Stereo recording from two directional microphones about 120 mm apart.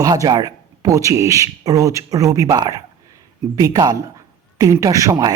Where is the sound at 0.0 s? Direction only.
30° right (ahead or behind).